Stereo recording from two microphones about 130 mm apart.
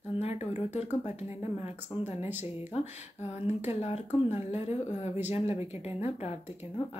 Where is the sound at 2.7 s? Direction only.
55° left (ahead or behind).